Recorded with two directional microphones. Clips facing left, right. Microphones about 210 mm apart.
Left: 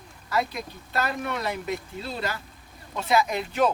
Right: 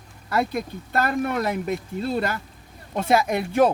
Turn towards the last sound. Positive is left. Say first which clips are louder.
# right 4 dB
turn(degrees=-55)  # may be behind; listen again after turning